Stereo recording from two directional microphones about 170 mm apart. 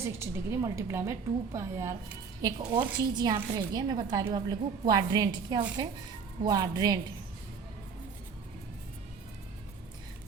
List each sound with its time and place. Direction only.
0.0 s a woman's voice: 15° right (ahead or behind)